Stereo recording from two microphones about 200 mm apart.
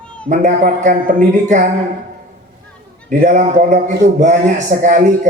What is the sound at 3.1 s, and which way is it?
A man's voice, 40° right (ahead or behind).